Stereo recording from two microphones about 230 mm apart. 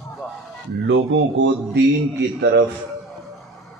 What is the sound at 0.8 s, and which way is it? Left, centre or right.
A man's voice, right.